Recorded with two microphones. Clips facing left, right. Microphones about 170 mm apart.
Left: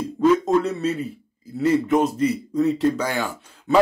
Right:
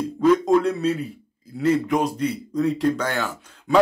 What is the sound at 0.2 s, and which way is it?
Speech, centre (ahead or behind).